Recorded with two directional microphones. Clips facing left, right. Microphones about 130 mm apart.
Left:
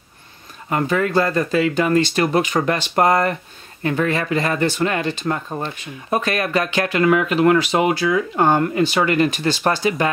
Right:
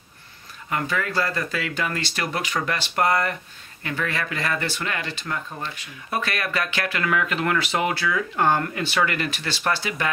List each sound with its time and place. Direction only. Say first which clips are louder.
0.7 s speech: left 7 dB; 30° left (ahead or behind)
9.5 s speech: left 6 dB; 45° left (ahead or behind)